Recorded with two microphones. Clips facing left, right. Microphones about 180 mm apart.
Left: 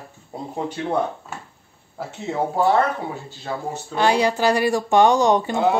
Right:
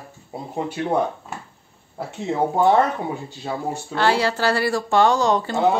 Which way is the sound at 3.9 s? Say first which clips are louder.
Left 2 dB; 15° left (ahead or behind).